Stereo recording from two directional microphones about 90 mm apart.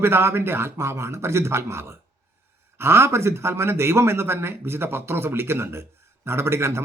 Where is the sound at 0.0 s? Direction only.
25° right (ahead or behind).